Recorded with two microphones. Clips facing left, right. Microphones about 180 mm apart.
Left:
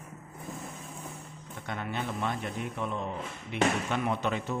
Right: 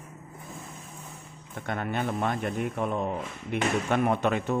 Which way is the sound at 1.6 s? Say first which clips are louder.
Right 5 dB; 55° right (ahead or behind).